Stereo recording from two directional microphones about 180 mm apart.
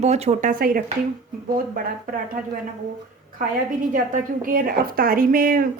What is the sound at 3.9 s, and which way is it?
A woman's voice, 50° right (ahead or behind).